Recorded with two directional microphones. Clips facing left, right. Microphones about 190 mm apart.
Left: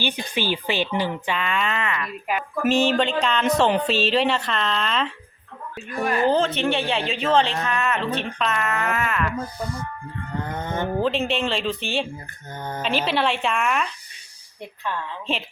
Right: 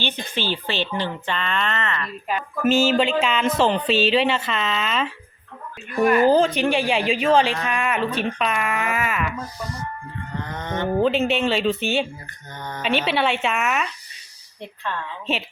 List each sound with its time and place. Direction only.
0.0 s speech: 10° left (ahead or behind)
2.6 s speech: 5° right (ahead or behind)
6.2 s speech: 10° right (ahead or behind)
9.4 s speech: 55° left (ahead or behind)
10.4 s livestock: 50° left (ahead or behind)
11.0 s speech: 5° right (ahead or behind)
14.9 s speech: 10° left (ahead or behind)